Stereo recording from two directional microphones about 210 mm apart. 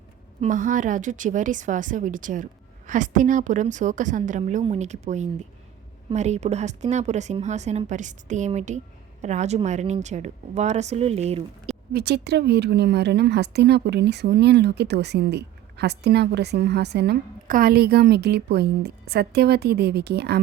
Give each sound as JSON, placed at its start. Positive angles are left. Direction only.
{"t": 0.4, "sound": "speech", "side_deg": -40}
{"t": 11.9, "sound": "a woman's voice", "side_deg": -50}